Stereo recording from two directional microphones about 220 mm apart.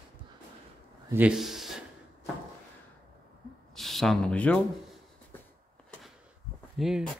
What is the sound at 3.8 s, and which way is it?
Speech, centre (ahead or behind).